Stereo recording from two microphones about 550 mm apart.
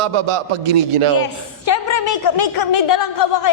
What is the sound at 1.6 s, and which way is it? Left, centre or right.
A woman's voice, left.